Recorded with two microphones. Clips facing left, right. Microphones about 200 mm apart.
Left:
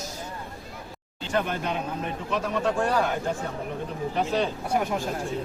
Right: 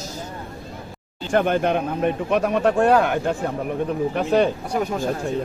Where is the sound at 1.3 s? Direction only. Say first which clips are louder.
Right 8 dB; 60° right (ahead or behind).